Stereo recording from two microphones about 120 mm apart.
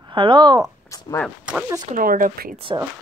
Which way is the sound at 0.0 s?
40° right (ahead or behind).